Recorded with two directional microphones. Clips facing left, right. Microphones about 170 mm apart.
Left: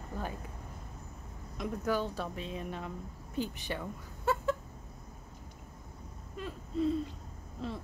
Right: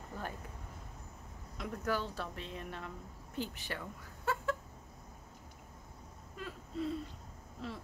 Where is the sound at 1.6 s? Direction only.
15° left (ahead or behind).